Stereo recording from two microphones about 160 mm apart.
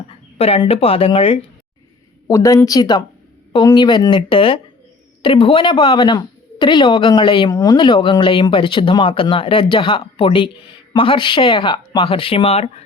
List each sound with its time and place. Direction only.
0.3 s speech: 40° left (ahead or behind)
2.2 s speech: 20° left (ahead or behind); by 12.8 s 40° left (ahead or behind)